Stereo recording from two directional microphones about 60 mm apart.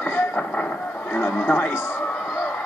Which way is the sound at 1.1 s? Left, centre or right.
Left.